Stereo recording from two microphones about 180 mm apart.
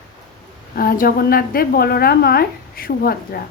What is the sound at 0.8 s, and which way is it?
A woman's voice, 55° left (ahead or behind).